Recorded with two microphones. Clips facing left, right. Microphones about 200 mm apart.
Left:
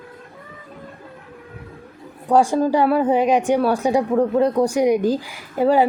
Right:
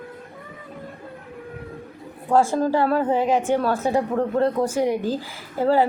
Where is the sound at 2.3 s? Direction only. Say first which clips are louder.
Left 3 dB; 15° left (ahead or behind).